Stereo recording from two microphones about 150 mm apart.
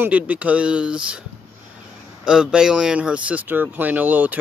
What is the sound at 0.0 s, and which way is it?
Speech, 10° right (ahead or behind).